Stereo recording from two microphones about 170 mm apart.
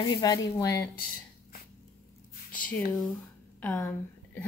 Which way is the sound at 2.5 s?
10° left (ahead or behind).